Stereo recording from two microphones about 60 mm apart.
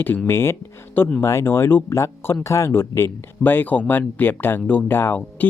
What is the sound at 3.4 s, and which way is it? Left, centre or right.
Speech, left.